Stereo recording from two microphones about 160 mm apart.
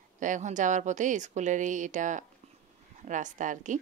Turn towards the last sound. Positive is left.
turn(degrees=-50)  # may be behind; listen again after turning